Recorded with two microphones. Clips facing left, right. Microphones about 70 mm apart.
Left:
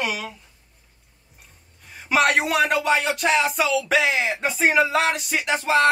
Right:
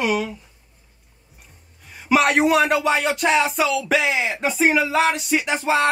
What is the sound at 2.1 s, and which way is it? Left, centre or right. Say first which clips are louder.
Music: right 3 dB; centre.